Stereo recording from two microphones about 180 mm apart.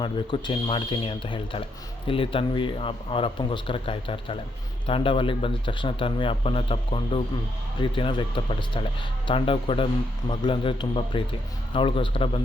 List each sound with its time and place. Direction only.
0.0 s a man's voice: 25° left (ahead or behind)